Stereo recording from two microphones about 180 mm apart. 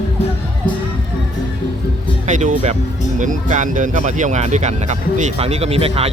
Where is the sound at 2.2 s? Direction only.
45° right (ahead or behind).